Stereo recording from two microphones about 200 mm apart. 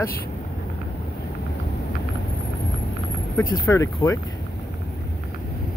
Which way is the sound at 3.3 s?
15° left (ahead or behind).